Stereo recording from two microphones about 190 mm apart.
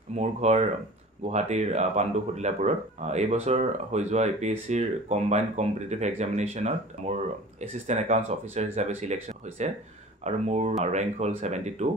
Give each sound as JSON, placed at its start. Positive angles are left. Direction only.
{"t": 0.1, "sound": "speech", "side_deg": -35}